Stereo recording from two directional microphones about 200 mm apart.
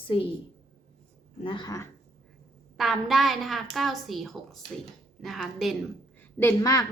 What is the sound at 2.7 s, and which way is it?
A woman's voice, centre (ahead or behind).